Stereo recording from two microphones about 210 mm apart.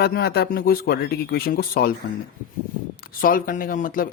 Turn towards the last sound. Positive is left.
turn(degrees=40)  # may be behind; listen again after turning